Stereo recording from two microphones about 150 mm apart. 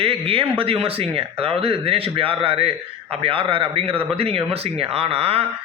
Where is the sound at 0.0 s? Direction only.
40° right (ahead or behind).